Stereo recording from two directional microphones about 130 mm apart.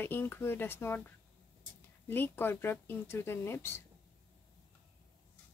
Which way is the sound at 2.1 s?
15° left (ahead or behind).